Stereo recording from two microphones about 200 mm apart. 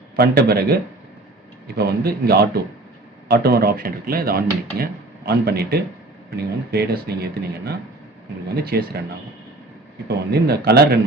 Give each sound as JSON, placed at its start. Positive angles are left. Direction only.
{"t": 0.2, "sound": "speech", "side_deg": -50}
{"t": 10.1, "sound": "speech", "side_deg": -55}